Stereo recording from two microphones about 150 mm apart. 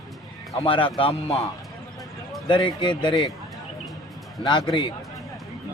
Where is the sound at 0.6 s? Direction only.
35° left (ahead or behind).